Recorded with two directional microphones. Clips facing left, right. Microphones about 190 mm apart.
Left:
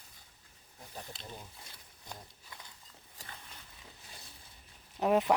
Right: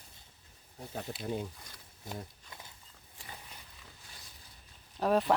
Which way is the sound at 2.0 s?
25° right (ahead or behind).